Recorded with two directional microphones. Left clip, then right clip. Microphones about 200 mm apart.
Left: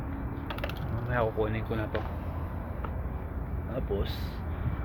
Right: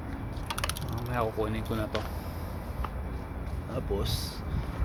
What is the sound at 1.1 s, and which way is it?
Speech, 10° right (ahead or behind).